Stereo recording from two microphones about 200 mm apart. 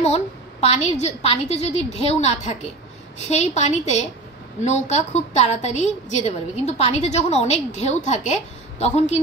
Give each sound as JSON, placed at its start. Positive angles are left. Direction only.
{"t": 0.0, "sound": "a woman's voice", "side_deg": 30}